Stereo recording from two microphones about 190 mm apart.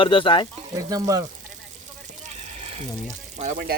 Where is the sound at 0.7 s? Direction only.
20° right (ahead or behind).